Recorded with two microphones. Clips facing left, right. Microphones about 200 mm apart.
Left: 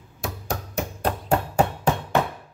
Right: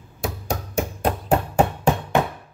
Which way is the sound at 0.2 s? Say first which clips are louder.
Right 3 dB; 15° right (ahead or behind).